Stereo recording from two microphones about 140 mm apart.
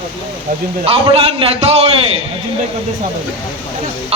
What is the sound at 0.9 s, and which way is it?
Speech, 40° right (ahead or behind).